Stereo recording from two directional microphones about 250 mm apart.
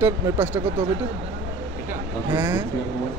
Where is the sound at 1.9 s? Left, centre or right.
Centre.